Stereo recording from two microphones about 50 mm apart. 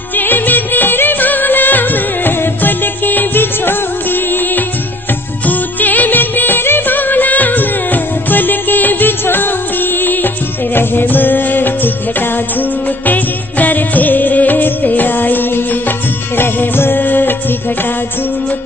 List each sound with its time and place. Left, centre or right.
0.2 s music of bollywood: left
13.0 s music: left